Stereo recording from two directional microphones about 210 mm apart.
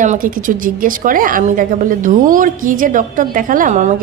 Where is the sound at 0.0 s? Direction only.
40° right (ahead or behind).